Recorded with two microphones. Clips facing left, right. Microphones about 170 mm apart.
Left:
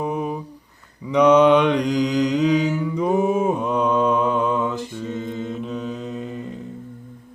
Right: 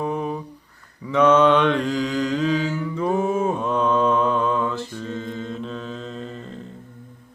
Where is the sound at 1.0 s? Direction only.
15° left (ahead or behind).